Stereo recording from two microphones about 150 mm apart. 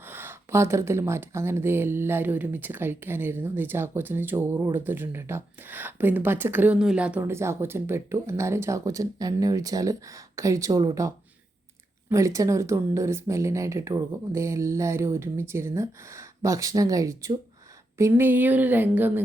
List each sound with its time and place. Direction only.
0.1 s a woman's voice: 15° right (ahead or behind)